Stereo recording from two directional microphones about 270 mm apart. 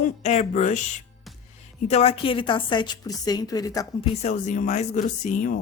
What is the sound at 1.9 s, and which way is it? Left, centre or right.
A woman's voice, left.